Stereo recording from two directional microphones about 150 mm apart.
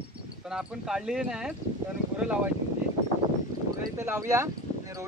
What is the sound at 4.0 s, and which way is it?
Speech, 20° right (ahead or behind).